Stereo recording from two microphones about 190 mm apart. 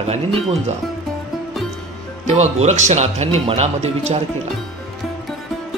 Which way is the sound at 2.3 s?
35° right (ahead or behind).